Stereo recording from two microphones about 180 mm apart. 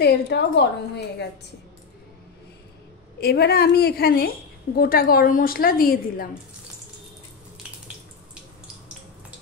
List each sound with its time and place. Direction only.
0.0 s a woman's voice: 65° left (ahead or behind)
3.2 s a woman's voice: 60° left (ahead or behind)